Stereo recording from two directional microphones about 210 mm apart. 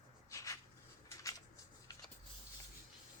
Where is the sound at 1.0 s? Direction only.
15° left (ahead or behind).